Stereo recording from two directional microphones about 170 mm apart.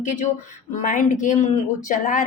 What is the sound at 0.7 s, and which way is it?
A woman's voice, 50° left (ahead or behind).